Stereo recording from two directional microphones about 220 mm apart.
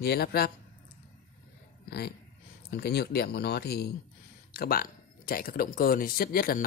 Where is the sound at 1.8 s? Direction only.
45° left (ahead or behind).